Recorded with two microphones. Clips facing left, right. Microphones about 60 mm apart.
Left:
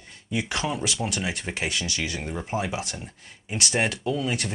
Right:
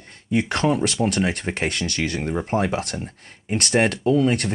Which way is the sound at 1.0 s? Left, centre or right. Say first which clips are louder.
Right 7 dB; right.